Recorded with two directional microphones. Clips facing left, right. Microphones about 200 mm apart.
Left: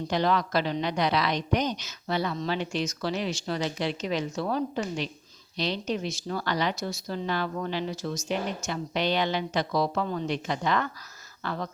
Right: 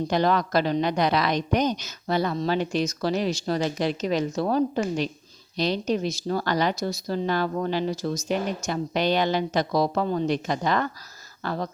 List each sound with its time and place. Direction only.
0.1 s a woman's voice: 45° right (ahead or behind)